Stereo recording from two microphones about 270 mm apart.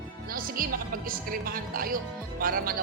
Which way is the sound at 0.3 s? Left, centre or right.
Right.